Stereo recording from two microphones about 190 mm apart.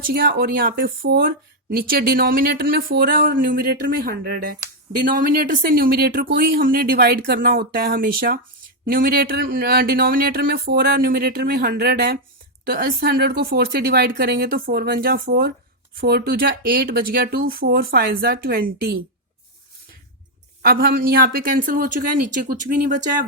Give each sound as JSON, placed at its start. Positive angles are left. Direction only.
{"t": 0.0, "sound": "speech", "side_deg": -50}
{"t": 20.6, "sound": "speech", "side_deg": -50}